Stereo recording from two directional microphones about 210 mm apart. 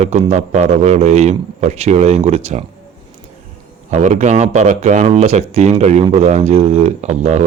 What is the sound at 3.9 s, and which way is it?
Speech, 35° right (ahead or behind).